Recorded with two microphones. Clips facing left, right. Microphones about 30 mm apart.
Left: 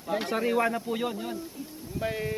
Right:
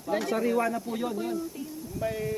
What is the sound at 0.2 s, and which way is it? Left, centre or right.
Speech, left.